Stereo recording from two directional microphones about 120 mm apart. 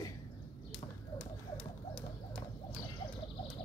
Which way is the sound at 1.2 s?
5° left (ahead or behind).